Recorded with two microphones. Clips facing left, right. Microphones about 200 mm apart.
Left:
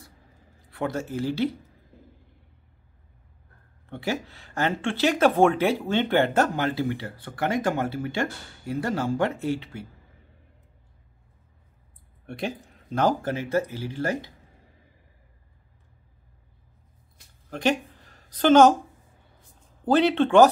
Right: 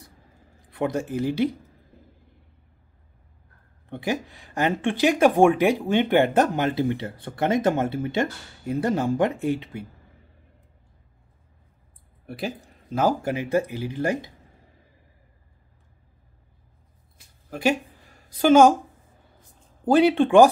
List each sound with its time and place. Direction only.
0.7 s speech: 15° right (ahead or behind)
3.9 s speech: 15° right (ahead or behind)
12.3 s speech: 5° right (ahead or behind)
17.5 s a sound: 10° right (ahead or behind)
19.8 s speech: 10° right (ahead or behind)